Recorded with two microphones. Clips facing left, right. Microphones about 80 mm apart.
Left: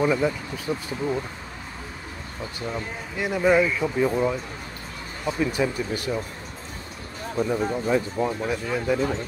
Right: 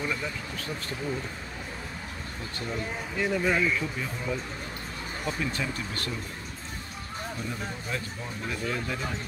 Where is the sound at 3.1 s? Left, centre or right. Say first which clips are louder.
Left 7 dB; centre.